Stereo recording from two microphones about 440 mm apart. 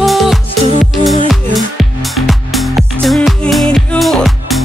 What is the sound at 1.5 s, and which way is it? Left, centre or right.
Music, centre.